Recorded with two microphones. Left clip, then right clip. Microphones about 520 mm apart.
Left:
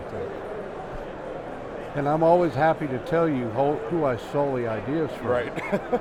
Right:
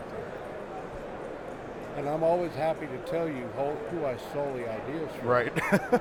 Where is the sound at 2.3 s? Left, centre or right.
Left.